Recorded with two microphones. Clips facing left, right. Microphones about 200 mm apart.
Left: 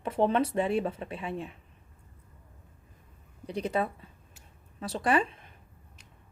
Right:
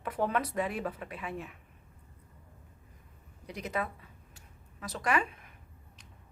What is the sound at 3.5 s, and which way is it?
A woman's voice, 30° left (ahead or behind).